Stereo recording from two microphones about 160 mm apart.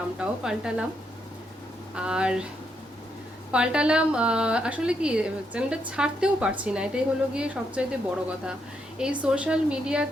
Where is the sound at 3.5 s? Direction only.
5° right (ahead or behind).